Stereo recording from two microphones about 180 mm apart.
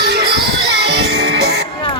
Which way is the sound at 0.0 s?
70° right (ahead or behind).